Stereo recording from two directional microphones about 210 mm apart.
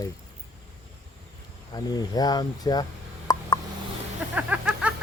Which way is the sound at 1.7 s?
20° left (ahead or behind).